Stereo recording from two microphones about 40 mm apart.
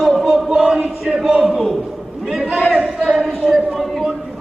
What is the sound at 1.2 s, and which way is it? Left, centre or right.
Speech, centre.